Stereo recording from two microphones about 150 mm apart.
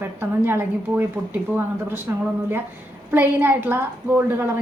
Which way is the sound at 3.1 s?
15° right (ahead or behind).